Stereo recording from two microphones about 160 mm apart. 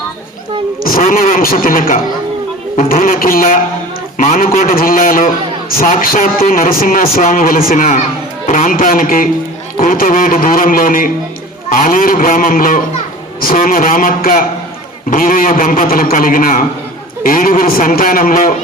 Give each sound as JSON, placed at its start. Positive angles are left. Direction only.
{"t": 0.9, "sound": "a man's voice", "side_deg": 60}